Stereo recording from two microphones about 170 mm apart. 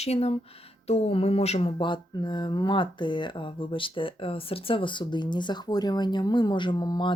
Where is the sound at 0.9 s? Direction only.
35° left (ahead or behind).